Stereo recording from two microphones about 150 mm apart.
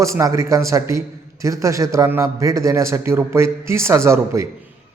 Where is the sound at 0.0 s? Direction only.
20° right (ahead or behind).